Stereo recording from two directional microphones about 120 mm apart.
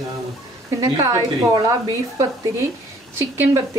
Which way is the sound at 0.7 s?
30° right (ahead or behind).